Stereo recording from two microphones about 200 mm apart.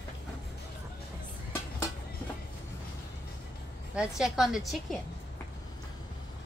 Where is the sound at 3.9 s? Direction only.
5° right (ahead or behind).